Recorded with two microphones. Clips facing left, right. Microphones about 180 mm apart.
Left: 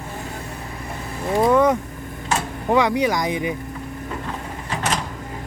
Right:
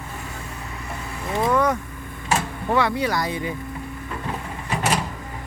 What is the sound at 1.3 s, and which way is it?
Vehicle, 20° left (ahead or behind).